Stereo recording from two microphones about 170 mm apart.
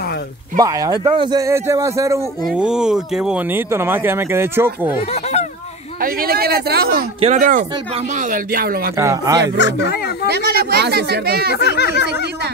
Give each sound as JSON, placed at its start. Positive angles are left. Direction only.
{"t": 0.6, "sound": "speech", "side_deg": -20}
{"t": 2.4, "sound": "speech", "side_deg": -5}
{"t": 5.1, "sound": "a sound", "side_deg": 40}
{"t": 5.9, "sound": "speech", "side_deg": -60}
{"t": 7.2, "sound": "speech", "side_deg": -40}
{"t": 8.9, "sound": "speech", "side_deg": -20}
{"t": 9.6, "sound": "speech", "side_deg": 85}
{"t": 10.2, "sound": "speech", "side_deg": -70}
{"t": 11.5, "sound": "speech", "side_deg": 75}